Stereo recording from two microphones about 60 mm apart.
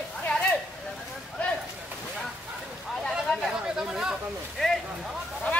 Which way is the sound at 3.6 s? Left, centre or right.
Centre.